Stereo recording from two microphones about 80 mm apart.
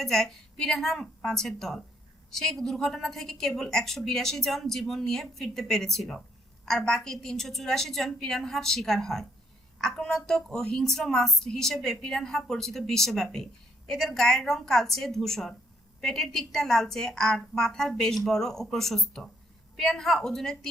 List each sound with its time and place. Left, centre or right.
0.0 s speech: centre